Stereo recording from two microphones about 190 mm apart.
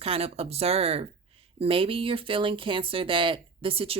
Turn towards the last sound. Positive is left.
turn(degrees=-30)  # may be behind; listen again after turning